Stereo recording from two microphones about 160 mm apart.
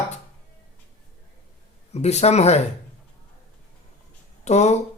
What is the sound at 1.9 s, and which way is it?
Speech, 40° left (ahead or behind).